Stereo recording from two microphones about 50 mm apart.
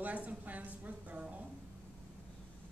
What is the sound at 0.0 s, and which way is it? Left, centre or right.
A woman's voice, right.